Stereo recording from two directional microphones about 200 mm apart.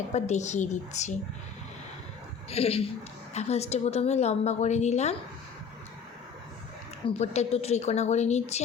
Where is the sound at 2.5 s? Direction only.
30° left (ahead or behind).